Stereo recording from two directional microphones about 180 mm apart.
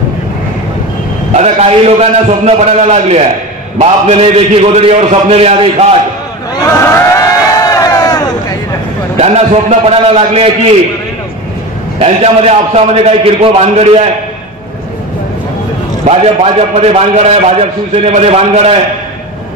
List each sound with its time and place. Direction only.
1.3 s a man's voice: 35° right (ahead or behind)
7.1 s crowd: 20° left (ahead or behind)
9.2 s a man's voice: 35° right (ahead or behind)
12.0 s a man's voice: 35° right (ahead or behind)
16.1 s a man's voice: 35° right (ahead or behind)